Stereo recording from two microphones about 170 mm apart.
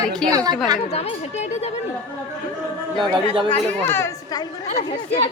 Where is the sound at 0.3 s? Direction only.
20° right (ahead or behind).